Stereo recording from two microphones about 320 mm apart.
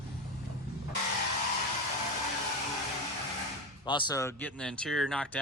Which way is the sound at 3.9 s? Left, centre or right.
Centre.